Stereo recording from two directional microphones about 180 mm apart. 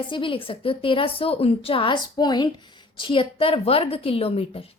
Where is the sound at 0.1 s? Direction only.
30° left (ahead or behind).